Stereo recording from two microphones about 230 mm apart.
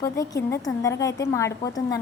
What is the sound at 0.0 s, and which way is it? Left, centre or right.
A woman's voice, centre.